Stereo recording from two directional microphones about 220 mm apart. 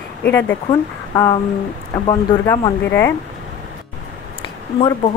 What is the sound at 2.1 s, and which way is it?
A woman's voice, 20° left (ahead or behind).